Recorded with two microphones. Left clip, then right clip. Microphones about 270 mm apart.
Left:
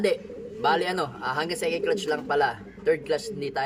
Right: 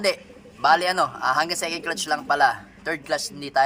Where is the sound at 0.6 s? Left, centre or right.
Centre.